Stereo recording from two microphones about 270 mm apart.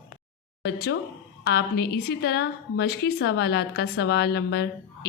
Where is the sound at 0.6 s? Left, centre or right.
Left.